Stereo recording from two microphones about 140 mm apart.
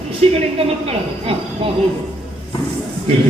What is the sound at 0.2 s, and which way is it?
A woman's voice, 45° right (ahead or behind).